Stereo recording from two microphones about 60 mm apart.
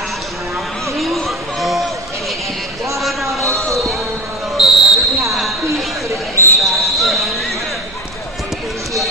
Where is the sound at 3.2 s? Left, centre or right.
Right.